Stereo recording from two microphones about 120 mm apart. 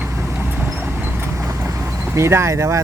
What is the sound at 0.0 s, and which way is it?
Vehicle, 15° right (ahead or behind).